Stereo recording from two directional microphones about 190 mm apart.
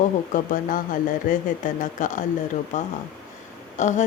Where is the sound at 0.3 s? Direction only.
40° left (ahead or behind).